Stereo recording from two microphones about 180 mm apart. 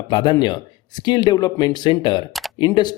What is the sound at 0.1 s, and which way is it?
Speech, 25° left (ahead or behind).